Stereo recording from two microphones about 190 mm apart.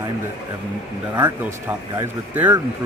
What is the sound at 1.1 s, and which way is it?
Speech, 15° right (ahead or behind).